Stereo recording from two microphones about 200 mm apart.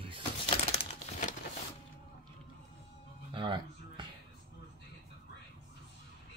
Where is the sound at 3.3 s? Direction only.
25° right (ahead or behind).